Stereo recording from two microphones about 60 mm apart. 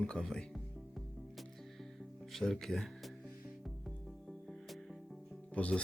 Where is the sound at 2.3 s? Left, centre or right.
Centre.